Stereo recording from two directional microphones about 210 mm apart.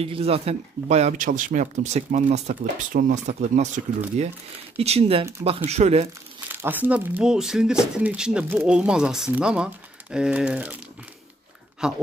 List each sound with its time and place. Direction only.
0.0 s speech: 30° right (ahead or behind)
6.5 s speech: 10° right (ahead or behind)
11.8 s speech: 5° right (ahead or behind)